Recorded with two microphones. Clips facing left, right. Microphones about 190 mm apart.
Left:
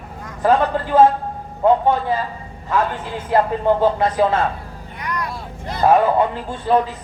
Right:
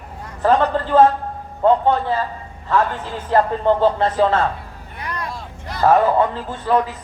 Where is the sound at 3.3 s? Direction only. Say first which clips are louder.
Even; 10° left (ahead or behind).